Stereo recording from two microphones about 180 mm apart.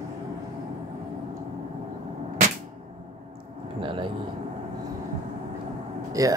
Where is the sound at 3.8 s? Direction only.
30° right (ahead or behind).